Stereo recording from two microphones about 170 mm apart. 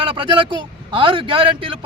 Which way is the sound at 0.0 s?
30° right (ahead or behind).